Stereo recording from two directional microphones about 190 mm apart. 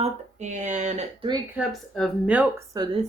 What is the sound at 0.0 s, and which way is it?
Speech, 40° right (ahead or behind).